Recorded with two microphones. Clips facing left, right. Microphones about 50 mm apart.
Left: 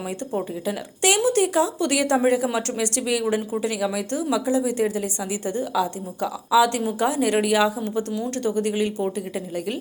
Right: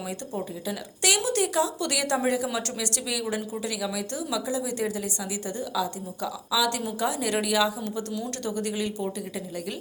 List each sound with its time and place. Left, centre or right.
0.3 s speech: left
5.7 s a woman's voice: left
7.8 s speech: centre